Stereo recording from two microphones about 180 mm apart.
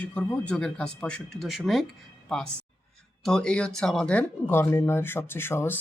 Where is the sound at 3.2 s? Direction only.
5° left (ahead or behind).